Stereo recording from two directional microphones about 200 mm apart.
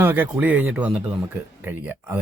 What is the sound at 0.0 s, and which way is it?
Speech, 10° right (ahead or behind).